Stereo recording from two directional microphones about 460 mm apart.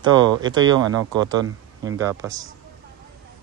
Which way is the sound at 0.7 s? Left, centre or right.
Centre.